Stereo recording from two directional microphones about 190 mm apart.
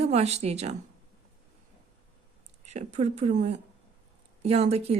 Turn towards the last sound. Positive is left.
turn(degrees=-35)  # may be behind; listen again after turning